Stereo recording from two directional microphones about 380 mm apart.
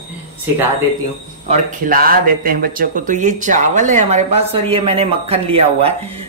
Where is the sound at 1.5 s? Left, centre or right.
Right.